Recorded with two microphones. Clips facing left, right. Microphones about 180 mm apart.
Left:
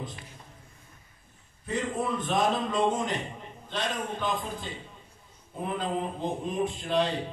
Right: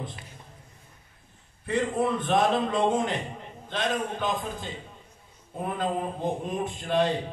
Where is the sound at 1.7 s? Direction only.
60° right (ahead or behind).